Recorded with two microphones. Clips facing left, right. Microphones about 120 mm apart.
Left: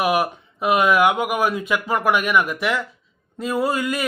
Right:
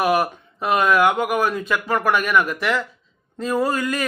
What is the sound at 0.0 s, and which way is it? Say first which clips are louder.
Speech: right 1 dB; 10° left (ahead or behind).